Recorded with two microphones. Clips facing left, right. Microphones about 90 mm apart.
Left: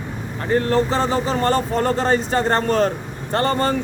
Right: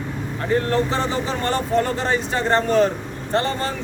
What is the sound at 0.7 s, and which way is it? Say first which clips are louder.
Speech: left 3 dB; 35° left (ahead or behind).